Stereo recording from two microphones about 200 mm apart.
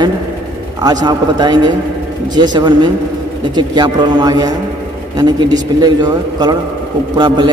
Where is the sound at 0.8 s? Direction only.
20° right (ahead or behind).